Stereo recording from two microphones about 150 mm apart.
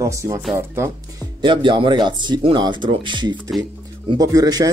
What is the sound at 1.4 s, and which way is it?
Speech, 30° right (ahead or behind).